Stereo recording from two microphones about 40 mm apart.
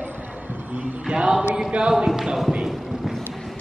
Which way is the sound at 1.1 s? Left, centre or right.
Right.